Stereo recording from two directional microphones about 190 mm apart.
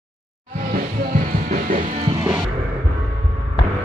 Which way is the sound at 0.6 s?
45° right (ahead or behind).